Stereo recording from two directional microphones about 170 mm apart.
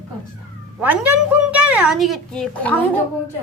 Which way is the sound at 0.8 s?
10° right (ahead or behind).